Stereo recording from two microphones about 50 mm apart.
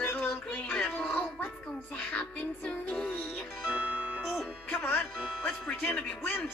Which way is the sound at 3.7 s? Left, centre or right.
Right.